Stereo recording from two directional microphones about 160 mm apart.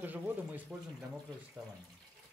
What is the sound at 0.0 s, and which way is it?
Speech, 10° right (ahead or behind).